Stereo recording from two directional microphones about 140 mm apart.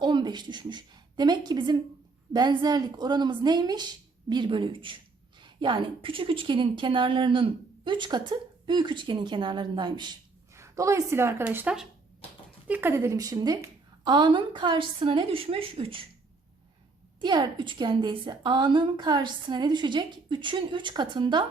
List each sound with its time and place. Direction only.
0.0 s a woman's voice: 30° right (ahead or behind)
10.5 s a woman's voice: 20° right (ahead or behind); by 16.0 s 40° right (ahead or behind)
17.2 s a woman's voice: 30° right (ahead or behind)